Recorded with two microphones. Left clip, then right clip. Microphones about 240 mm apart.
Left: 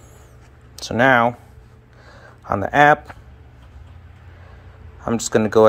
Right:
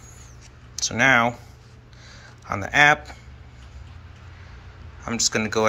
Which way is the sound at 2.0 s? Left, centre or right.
Left.